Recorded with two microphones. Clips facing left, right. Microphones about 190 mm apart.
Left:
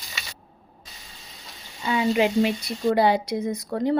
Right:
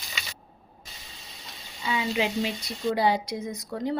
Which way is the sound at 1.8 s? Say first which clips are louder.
Left 6 dB; 50° left (ahead or behind).